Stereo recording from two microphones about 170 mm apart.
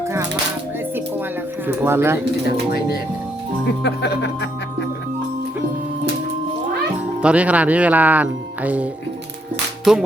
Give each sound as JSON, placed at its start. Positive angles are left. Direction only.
{"t": 1.6, "sound": "speech", "side_deg": -10}
{"t": 3.8, "sound": "music", "side_deg": 90}
{"t": 7.2, "sound": "speech", "side_deg": -5}
{"t": 9.9, "sound": "music", "side_deg": -5}